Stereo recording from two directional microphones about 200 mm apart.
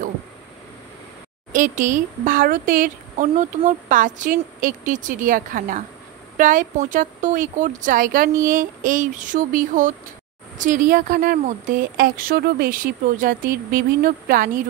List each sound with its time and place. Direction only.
1.5 s speech: 40° right (ahead or behind)